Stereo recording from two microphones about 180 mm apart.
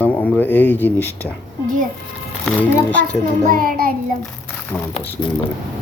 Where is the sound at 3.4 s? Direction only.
50° right (ahead or behind).